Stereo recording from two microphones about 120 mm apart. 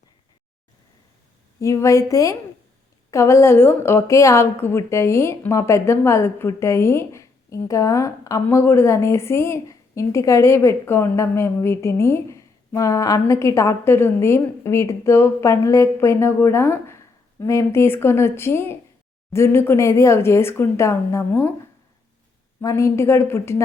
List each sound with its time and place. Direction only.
1.5 s a woman's voice: 25° left (ahead or behind)
22.6 s a woman's voice: 25° left (ahead or behind)